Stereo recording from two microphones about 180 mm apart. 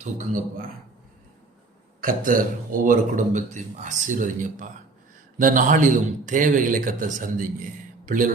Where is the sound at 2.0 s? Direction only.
50° right (ahead or behind).